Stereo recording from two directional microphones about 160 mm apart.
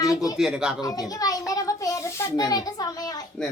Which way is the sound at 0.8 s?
25° left (ahead or behind).